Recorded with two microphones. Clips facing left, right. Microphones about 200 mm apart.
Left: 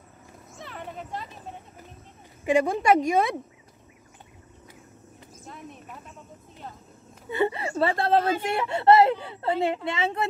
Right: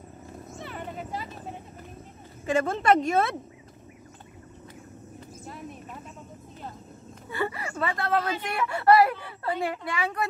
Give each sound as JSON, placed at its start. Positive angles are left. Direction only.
{"t": 0.6, "sound": "clip-clop", "side_deg": 0}
{"t": 2.4, "sound": "a woman's voice", "side_deg": 15}
{"t": 5.4, "sound": "a sound", "side_deg": 0}
{"t": 7.2, "sound": "whimper", "side_deg": 20}
{"t": 8.4, "sound": "a woman's voice", "side_deg": 25}